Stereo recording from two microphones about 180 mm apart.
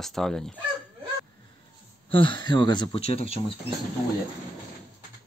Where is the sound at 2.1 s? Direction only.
25° left (ahead or behind).